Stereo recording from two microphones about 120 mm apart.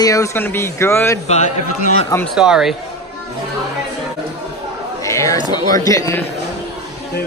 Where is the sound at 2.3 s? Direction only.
5° right (ahead or behind).